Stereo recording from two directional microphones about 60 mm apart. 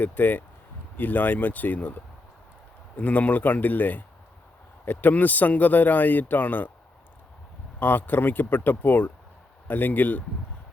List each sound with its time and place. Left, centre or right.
0.0 s speech: left
3.0 s speech: left
7.8 s speech: left